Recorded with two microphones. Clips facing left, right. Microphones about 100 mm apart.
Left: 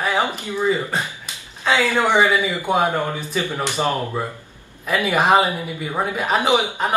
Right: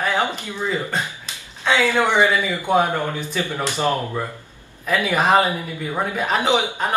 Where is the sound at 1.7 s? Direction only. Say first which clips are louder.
Even; 15° left (ahead or behind).